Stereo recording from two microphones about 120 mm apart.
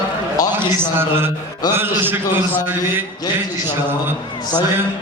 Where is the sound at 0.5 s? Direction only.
20° right (ahead or behind).